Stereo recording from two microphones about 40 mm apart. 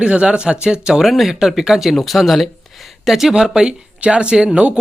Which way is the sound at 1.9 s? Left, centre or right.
Centre.